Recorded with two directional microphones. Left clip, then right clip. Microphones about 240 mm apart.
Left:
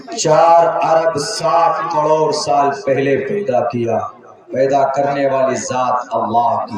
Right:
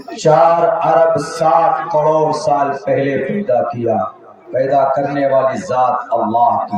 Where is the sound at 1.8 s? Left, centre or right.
Left.